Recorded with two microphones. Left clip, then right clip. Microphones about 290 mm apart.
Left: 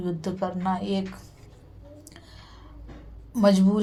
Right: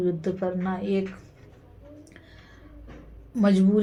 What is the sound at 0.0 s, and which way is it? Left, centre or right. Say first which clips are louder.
A woman's voice: right 3 dB; left.